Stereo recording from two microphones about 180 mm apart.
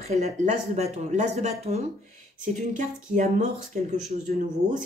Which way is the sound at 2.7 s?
45° right (ahead or behind).